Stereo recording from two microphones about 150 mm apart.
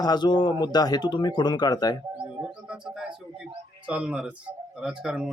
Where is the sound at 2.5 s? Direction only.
5° right (ahead or behind).